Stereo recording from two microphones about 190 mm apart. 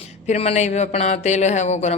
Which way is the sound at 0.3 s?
35° left (ahead or behind).